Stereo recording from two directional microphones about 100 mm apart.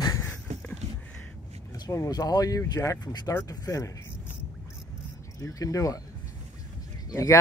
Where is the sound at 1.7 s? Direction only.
35° left (ahead or behind).